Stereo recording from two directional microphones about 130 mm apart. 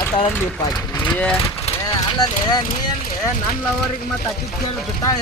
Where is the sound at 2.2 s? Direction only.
30° left (ahead or behind).